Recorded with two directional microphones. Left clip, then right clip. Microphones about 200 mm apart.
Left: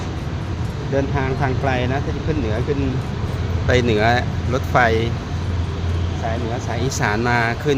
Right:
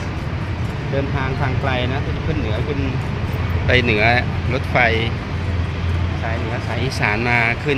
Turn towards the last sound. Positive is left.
turn(degrees=20)  # may be behind; listen again after turning